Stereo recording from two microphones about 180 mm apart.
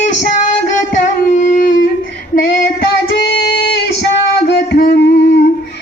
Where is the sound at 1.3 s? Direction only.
45° left (ahead or behind).